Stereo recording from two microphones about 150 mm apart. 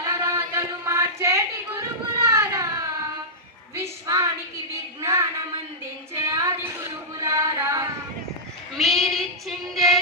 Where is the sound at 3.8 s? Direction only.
20° right (ahead or behind).